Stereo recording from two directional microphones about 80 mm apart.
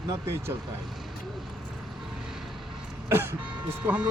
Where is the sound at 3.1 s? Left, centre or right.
Right.